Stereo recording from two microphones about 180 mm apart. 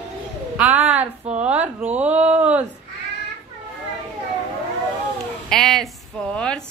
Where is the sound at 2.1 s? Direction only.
40° right (ahead or behind).